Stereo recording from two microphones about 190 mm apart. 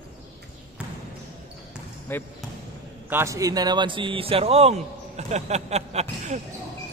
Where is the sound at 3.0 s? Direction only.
15° right (ahead or behind); by 6.0 s 35° right (ahead or behind).